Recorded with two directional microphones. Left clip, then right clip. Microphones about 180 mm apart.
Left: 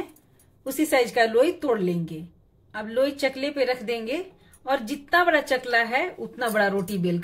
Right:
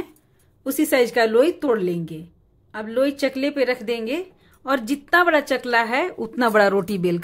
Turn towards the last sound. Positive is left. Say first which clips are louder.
# right 6 dB
turn(degrees=-40)  # may be behind; listen again after turning